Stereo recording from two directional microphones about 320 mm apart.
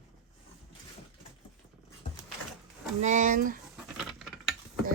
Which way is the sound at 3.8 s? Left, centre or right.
Centre.